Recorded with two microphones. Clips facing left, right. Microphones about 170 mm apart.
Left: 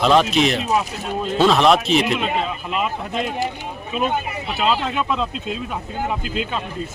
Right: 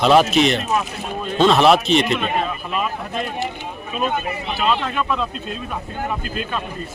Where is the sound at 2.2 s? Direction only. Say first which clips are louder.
Even; 20° left (ahead or behind).